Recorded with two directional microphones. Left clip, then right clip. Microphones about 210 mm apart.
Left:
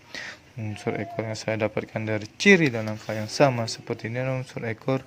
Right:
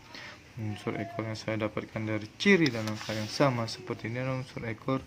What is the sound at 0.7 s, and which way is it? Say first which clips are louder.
Speech: left 6 dB; 25° left (ahead or behind).